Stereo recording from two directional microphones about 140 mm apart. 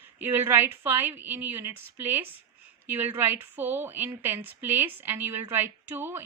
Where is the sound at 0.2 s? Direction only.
15° right (ahead or behind).